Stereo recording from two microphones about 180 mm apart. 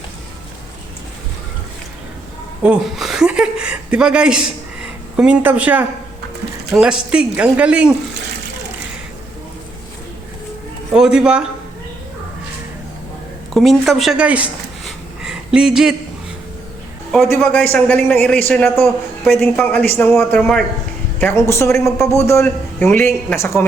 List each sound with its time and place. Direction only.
2.6 s speech: 5° right (ahead or behind)
10.9 s speech: 5° right (ahead or behind)
13.5 s a sound: centre (ahead or behind)
17.3 s speech: 10° left (ahead or behind)